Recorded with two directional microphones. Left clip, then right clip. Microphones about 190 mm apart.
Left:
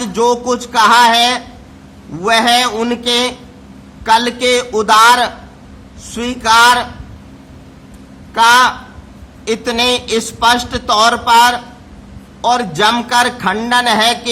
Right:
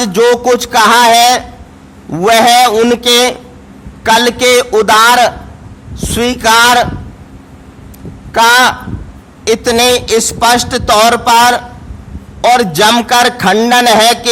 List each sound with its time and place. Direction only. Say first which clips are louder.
0.0 s a man's voice: right 5 dB; 45° right (ahead or behind)
8.3 s a man's voice: right 2 dB; 45° right (ahead or behind)